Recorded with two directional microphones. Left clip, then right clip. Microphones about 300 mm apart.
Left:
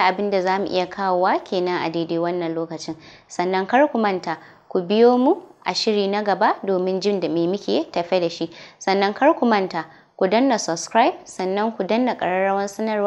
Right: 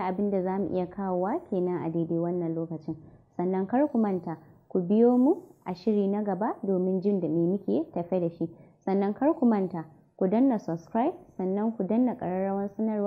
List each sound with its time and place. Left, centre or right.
0.0 s a woman's voice: centre
5.1 s speech: centre
5.6 s a woman's voice: centre